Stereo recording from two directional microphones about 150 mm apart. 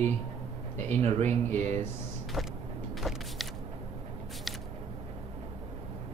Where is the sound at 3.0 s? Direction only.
Centre (ahead or behind).